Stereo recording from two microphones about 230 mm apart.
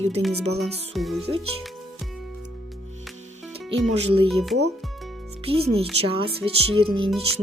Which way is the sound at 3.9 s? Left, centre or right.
Right.